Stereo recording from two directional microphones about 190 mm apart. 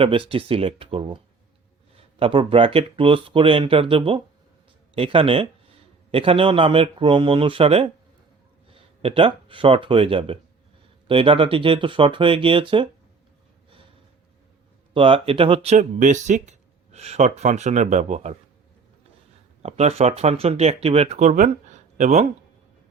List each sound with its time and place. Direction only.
0.0 s speech: 30° right (ahead or behind)
14.9 s speech: 25° right (ahead or behind)
19.6 s speech: 35° right (ahead or behind)